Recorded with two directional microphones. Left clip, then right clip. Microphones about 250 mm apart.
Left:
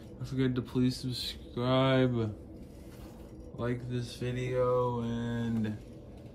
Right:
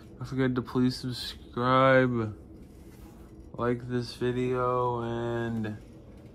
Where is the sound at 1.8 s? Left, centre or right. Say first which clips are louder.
Right 7 dB; right.